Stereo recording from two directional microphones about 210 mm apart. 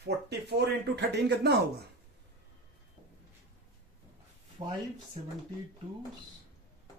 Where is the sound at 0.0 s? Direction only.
50° right (ahead or behind).